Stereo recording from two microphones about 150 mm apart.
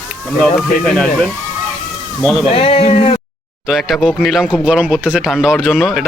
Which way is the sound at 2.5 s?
40° left (ahead or behind).